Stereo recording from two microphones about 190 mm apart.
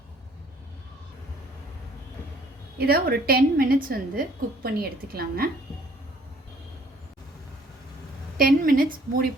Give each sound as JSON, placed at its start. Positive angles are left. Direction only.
{"t": 2.7, "sound": "a woman's voice", "side_deg": -55}
{"t": 8.4, "sound": "a woman's voice", "side_deg": -50}